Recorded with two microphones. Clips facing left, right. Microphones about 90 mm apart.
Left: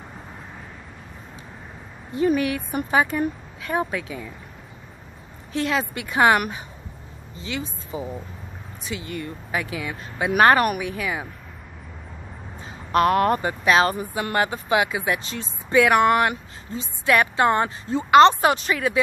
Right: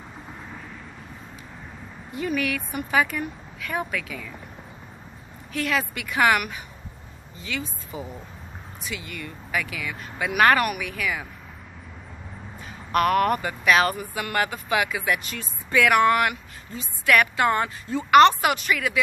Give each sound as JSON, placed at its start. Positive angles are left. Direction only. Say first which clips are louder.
{"t": 2.1, "sound": "a woman's voice", "louder": "left 6 dB", "side_deg": 30}
{"t": 5.5, "sound": "speech", "louder": "left 2 dB", "side_deg": 25}
{"t": 12.5, "sound": "speech", "louder": "left 3 dB", "side_deg": 25}